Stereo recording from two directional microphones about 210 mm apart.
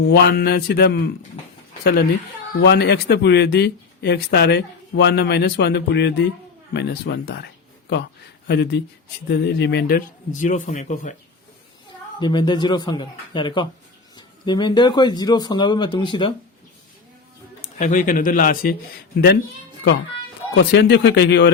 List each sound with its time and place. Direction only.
0.1 s speech: 50° left (ahead or behind)
12.2 s speech: 20° left (ahead or behind)
17.6 s a man's voice: 35° left (ahead or behind)
20.7 s speech: 55° left (ahead or behind)